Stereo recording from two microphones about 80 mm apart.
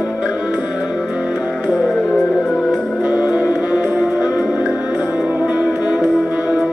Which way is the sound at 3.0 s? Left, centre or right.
Centre.